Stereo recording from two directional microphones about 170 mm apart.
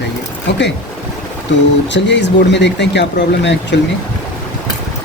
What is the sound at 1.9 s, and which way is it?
Speech, 90° left.